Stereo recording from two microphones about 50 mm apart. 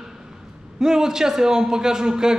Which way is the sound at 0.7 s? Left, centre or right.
Centre.